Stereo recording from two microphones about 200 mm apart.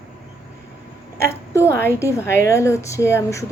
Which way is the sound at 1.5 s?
15° left (ahead or behind).